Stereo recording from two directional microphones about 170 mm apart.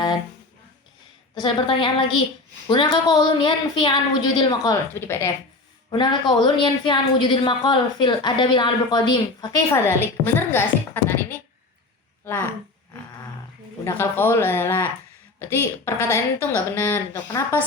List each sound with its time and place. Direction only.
1.4 s a woman's voice: 30° left (ahead or behind)
5.9 s speech: 25° left (ahead or behind)
9.7 s a woman's voice: 15° left (ahead or behind)
13.8 s a woman's voice: 15° left (ahead or behind)